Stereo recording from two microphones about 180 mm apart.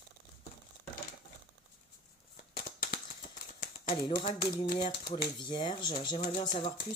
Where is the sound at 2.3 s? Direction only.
40° left (ahead or behind).